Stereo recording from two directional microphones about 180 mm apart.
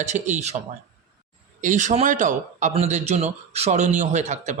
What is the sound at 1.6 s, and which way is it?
A man's voice, 45° right (ahead or behind).